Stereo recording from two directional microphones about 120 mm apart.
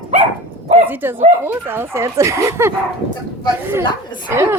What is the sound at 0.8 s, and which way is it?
Speech, 15° right (ahead or behind).